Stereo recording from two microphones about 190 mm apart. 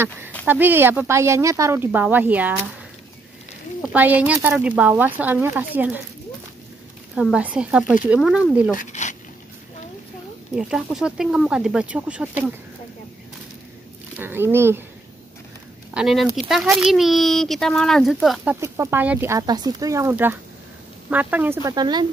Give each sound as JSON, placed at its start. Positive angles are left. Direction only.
{"t": 0.5, "sound": "speech", "side_deg": -10}
{"t": 3.9, "sound": "speech", "side_deg": -10}
{"t": 7.2, "sound": "speech", "side_deg": -5}
{"t": 8.7, "sound": "speech", "side_deg": 40}
{"t": 10.5, "sound": "speech", "side_deg": -5}
{"t": 14.1, "sound": "speech", "side_deg": -10}
{"t": 15.9, "sound": "speech", "side_deg": -5}
{"t": 21.6, "sound": "speech", "side_deg": -20}